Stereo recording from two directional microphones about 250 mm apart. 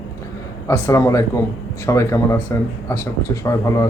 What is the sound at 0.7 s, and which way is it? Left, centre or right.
Speech, centre.